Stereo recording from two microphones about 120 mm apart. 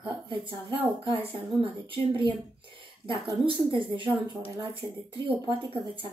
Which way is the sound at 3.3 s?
45° right (ahead or behind).